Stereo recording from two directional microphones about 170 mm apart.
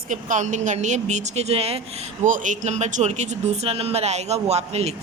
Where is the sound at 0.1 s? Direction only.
45° right (ahead or behind).